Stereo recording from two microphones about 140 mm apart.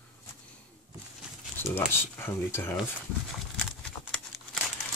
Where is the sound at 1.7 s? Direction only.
15° left (ahead or behind).